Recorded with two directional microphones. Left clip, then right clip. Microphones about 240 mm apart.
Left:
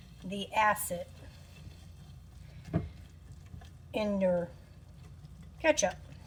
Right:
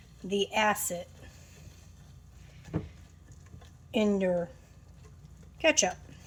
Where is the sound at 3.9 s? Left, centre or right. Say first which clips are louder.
Right 3 dB; right.